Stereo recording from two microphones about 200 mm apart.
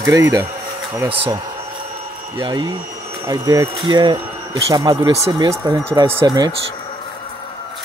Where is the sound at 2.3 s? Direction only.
20° right (ahead or behind).